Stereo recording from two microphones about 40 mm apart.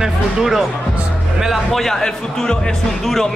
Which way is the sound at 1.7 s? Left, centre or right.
Centre.